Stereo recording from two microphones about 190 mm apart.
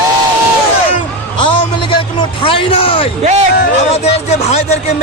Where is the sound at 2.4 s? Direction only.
30° left (ahead or behind).